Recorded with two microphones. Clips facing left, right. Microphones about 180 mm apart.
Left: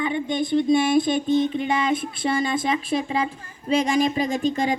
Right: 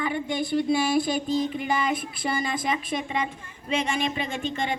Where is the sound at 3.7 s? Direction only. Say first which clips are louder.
Left 6 dB; 35° left (ahead or behind).